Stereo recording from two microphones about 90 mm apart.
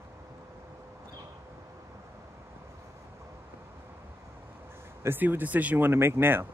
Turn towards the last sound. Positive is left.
turn(degrees=-25)  # may be behind; listen again after turning